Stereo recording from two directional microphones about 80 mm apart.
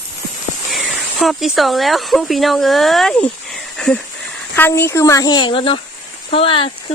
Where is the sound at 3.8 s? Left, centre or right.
Centre.